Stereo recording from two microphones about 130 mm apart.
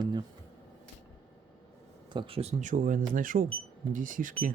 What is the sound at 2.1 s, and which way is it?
Speech, 50° right (ahead or behind).